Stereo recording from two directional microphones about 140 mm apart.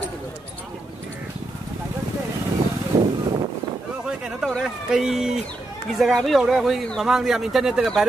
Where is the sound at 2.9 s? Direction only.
30° right (ahead or behind).